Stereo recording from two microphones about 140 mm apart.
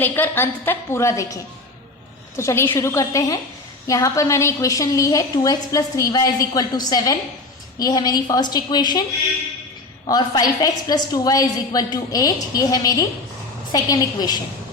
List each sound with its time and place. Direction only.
0.0 s a woman's voice: 15° left (ahead or behind)
2.3 s a woman's voice: 20° left (ahead or behind)
10.1 s a woman's voice: 25° left (ahead or behind)